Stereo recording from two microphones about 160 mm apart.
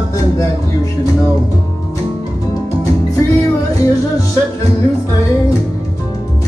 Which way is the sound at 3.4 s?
20° left (ahead or behind).